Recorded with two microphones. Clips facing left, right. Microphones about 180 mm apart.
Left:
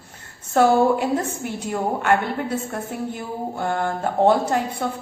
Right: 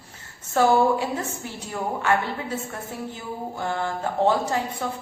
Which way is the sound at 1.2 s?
65° left (ahead or behind).